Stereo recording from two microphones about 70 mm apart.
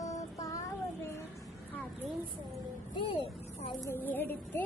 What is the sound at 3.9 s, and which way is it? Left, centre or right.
Speech, left.